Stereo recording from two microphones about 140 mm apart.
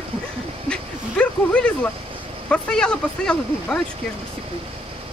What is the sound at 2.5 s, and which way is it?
Speech, 5° left (ahead or behind).